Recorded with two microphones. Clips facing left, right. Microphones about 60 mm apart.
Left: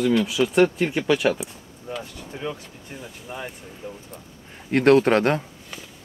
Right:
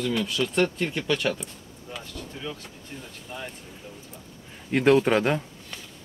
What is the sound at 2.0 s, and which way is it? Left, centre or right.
Speech, left.